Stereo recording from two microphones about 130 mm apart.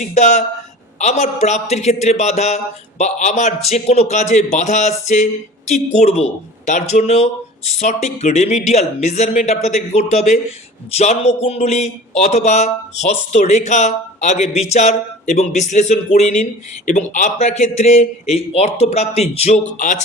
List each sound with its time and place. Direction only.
0.0 s a man's voice: 70° left (ahead or behind)